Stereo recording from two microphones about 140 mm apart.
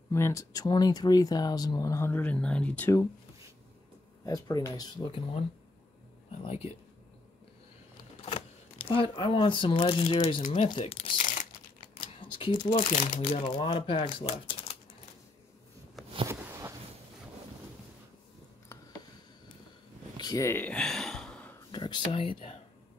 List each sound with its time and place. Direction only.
0.1 s speech: 20° left (ahead or behind)
4.3 s speech: 25° left (ahead or behind)
6.3 s speech: 45° left (ahead or behind)
8.3 s speech: 40° left (ahead or behind)
10.4 s speech: 50° left (ahead or behind)
11.1 s crumpling: 65° left (ahead or behind)
11.8 s camera: 35° left (ahead or behind)
12.9 s speech: 65° left (ahead or behind)
13.4 s speech: 40° left (ahead or behind)
16.3 s a sound: 15° right (ahead or behind)
20.2 s a sound: 25° left (ahead or behind); by 21.5 s 5° left (ahead or behind)
21.7 s speech: 35° left (ahead or behind)